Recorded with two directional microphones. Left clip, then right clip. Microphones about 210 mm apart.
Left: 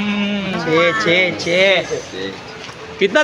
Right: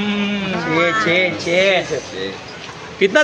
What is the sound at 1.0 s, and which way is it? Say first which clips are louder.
Speech: left 1 dB; 55° left (ahead or behind).